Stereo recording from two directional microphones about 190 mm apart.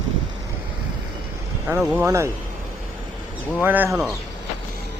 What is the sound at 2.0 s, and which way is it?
Speech, 15° right (ahead or behind).